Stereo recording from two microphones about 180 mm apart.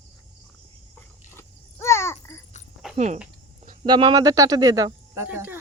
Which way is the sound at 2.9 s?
40° right (ahead or behind).